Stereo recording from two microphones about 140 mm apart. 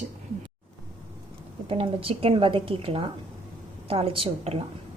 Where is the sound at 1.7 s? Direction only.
40° right (ahead or behind).